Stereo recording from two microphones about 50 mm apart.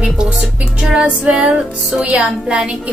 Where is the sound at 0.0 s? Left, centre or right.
Centre.